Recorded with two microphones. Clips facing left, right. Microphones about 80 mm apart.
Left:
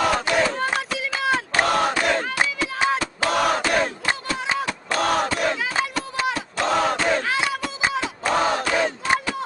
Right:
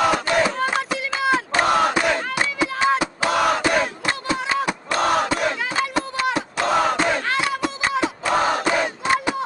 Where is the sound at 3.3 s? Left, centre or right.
Centre.